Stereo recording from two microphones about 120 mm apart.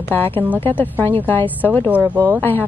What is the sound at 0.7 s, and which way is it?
A woman's voice, 15° left (ahead or behind).